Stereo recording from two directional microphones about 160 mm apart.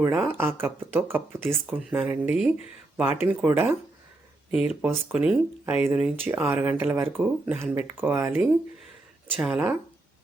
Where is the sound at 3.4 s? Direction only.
10° right (ahead or behind).